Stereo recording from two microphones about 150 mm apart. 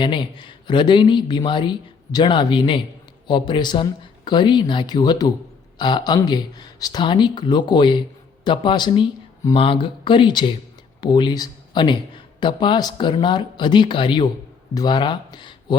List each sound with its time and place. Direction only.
0.0 s speech: 30° left (ahead or behind)